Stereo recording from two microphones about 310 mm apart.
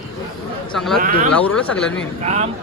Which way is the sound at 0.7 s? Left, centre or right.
Centre.